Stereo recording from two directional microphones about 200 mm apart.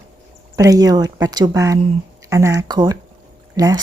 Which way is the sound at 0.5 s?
15° right (ahead or behind).